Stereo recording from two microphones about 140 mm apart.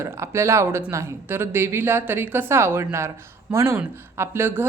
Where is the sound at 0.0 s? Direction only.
20° right (ahead or behind).